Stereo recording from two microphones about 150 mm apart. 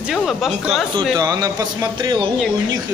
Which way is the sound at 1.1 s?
25° right (ahead or behind).